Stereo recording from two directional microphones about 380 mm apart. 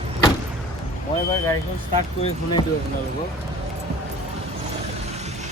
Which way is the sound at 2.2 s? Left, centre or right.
Centre.